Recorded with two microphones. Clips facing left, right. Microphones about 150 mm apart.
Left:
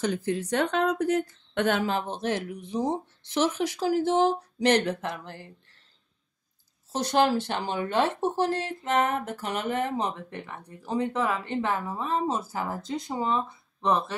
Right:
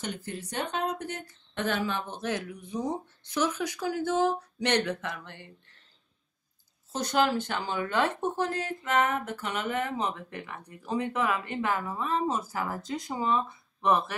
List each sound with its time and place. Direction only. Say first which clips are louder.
0.3 s a woman's voice: left 7 dB; 90° left
2.2 s speech: left 3 dB; 30° left (ahead or behind)
6.9 s speech: left 3 dB; 30° left (ahead or behind)
8.9 s speech: left 1 dB; 40° left (ahead or behind); by 13.4 s 25° left (ahead or behind)